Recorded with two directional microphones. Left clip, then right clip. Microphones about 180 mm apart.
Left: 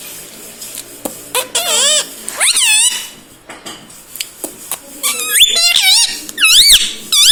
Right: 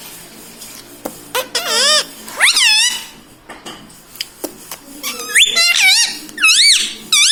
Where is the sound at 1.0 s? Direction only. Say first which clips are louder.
Left 1 dB; 20° left (ahead or behind).